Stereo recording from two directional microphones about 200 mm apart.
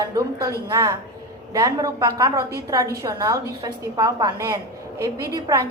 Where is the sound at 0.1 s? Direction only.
15° right (ahead or behind).